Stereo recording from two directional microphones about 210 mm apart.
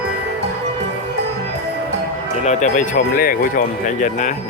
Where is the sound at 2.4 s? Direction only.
35° left (ahead or behind).